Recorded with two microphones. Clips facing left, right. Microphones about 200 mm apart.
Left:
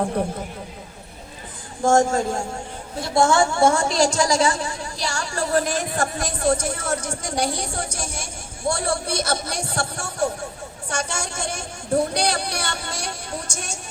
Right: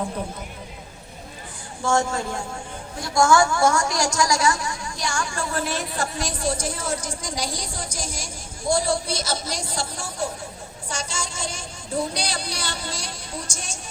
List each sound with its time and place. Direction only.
1.8 s speech: 45° left (ahead or behind)
3.2 s a woman's voice: 30° left (ahead or behind); by 13.7 s 60° left (ahead or behind)